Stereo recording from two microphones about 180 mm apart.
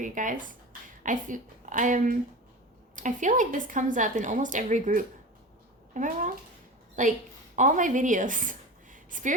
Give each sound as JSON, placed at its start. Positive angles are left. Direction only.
{"t": 0.0, "sound": "a woman's voice", "side_deg": -45}
{"t": 7.5, "sound": "a woman's voice", "side_deg": -45}